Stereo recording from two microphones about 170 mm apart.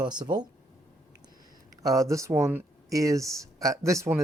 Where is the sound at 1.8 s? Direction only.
20° right (ahead or behind).